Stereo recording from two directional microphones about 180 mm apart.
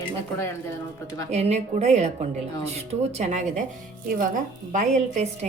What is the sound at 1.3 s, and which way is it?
A woman's voice, 35° right (ahead or behind).